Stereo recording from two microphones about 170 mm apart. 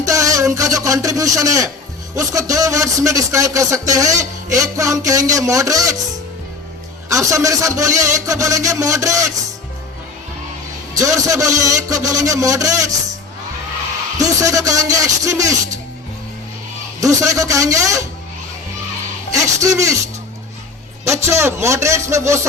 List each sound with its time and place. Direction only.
0.1 s a sound: 20° right (ahead or behind)
2.1 s speech: 20° right (ahead or behind)
7.1 s speech: 20° right (ahead or behind)
11.0 s speech: 20° right (ahead or behind)
14.2 s speech: 20° right (ahead or behind)
17.0 s speech: 20° right (ahead or behind)
19.3 s speech: 20° right (ahead or behind)
21.0 s speech: 15° right (ahead or behind)